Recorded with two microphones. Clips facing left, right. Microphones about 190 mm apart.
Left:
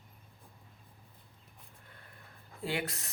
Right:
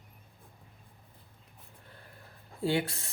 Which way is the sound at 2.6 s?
30° right (ahead or behind).